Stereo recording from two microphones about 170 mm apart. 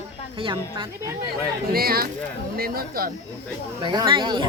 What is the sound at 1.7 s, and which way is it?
Speech, 60° right (ahead or behind).